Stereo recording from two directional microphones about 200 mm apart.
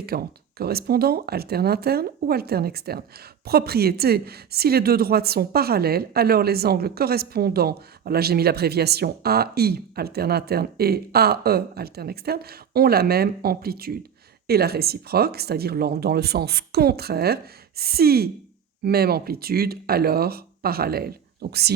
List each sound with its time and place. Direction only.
0.0 s a woman's voice: 50° right (ahead or behind)